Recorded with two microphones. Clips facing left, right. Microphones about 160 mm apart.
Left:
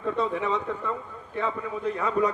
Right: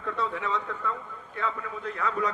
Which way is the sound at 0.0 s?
15° left (ahead or behind).